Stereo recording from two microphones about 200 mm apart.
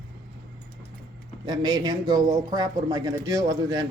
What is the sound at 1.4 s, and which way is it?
Speech, 20° right (ahead or behind).